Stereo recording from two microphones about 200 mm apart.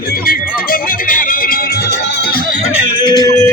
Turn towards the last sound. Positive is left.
turn(degrees=20)  # may be behind; listen again after turning